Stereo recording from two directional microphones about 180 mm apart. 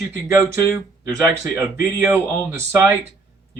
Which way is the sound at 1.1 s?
20° right (ahead or behind).